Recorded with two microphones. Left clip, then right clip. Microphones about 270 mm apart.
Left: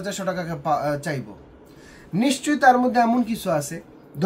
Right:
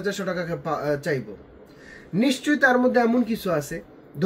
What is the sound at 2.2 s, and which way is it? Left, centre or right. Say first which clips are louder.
Speech: even; centre.